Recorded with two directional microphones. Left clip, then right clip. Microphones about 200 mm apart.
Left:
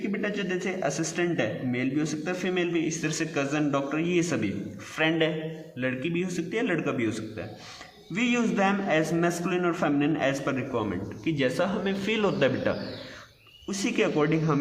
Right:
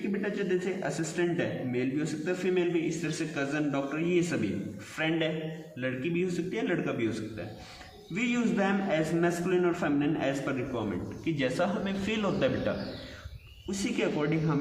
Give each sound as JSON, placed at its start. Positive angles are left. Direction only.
{"t": 0.2, "sound": "a man's voice", "side_deg": 50}